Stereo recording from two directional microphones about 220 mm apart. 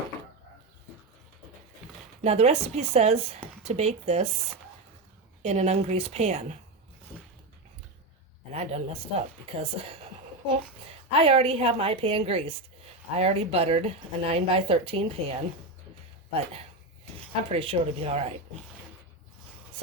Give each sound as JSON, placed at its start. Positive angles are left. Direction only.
{"t": 2.2, "sound": "speech", "side_deg": -30}
{"t": 5.4, "sound": "a woman's voice", "side_deg": -30}
{"t": 8.5, "sound": "speech", "side_deg": -30}
{"t": 11.1, "sound": "speech", "side_deg": -25}